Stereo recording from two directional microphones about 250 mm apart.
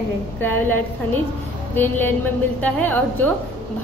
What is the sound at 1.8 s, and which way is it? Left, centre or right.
A woman's voice, centre.